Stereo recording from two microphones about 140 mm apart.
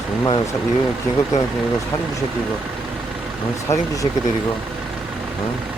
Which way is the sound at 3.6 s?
25° left (ahead or behind).